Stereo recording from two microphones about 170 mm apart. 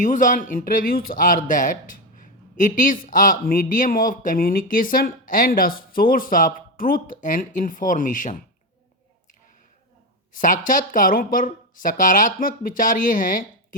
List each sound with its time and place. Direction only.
0.0 s speech: 50° left (ahead or behind)
10.3 s speech: 50° left (ahead or behind)